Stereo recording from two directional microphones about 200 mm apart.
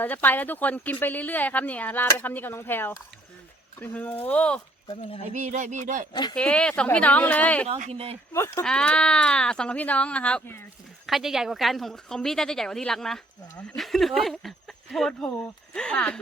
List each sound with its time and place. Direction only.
0.0 s speech: 10° left (ahead or behind)
4.9 s speech: 30° left (ahead or behind)
5.2 s a sound: 35° right (ahead or behind)
6.3 s speech: 5° left (ahead or behind)
7.7 s a sound: 30° right (ahead or behind)
8.3 s speech: 15° left (ahead or behind)
11.0 s speech: centre (ahead or behind)